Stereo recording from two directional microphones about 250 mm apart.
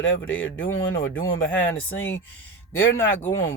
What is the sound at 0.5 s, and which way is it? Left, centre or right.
Speech, centre.